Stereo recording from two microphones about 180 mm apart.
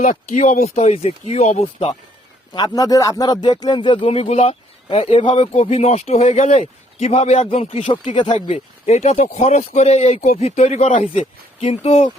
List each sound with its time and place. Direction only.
0.0 s speech: 45° left (ahead or behind)
2.5 s speech: 25° left (ahead or behind)